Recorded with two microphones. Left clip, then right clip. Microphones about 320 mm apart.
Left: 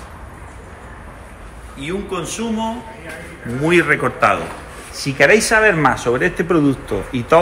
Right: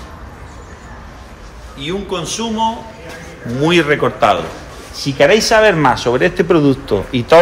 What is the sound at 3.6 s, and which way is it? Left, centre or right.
Speech, centre.